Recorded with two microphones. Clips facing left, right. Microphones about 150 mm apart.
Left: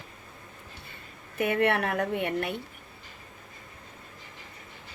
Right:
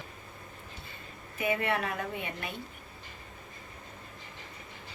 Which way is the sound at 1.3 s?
65° left (ahead or behind).